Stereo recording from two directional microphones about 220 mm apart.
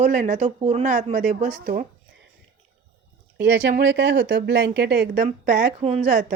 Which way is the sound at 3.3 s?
55° right (ahead or behind).